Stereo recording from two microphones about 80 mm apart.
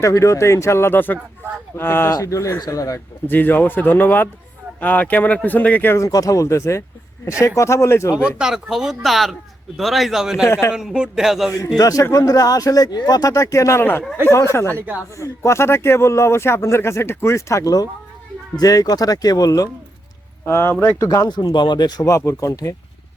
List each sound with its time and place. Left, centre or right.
0.0 s speech: left
2.2 s speech: left
3.2 s speech: left
6.0 s speech: left
8.4 s speech: centre
10.4 s speech: left
10.8 s speech: centre
11.8 s speech: left
14.8 s speech: right
15.2 s speech: left
20.4 s speech: left
21.0 s speech: left
21.5 s speech: left
22.1 s speech: left